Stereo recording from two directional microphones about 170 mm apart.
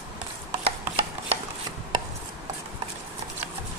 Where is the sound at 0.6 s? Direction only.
40° right (ahead or behind).